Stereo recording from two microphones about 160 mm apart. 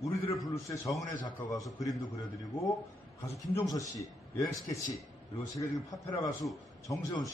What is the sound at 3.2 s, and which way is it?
A man's voice, 20° left (ahead or behind).